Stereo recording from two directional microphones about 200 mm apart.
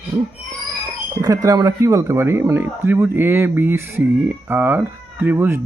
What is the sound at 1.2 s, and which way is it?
Speech, 15° right (ahead or behind).